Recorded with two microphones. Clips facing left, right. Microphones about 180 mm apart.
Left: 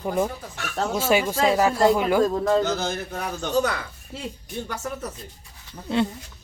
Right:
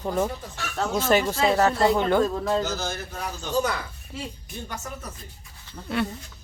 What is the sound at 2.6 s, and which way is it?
Speech, 55° left (ahead or behind).